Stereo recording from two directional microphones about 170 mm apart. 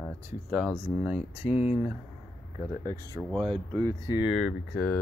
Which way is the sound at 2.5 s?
20° right (ahead or behind).